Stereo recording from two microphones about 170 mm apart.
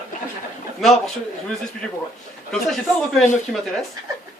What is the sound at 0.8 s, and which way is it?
Speech, centre (ahead or behind).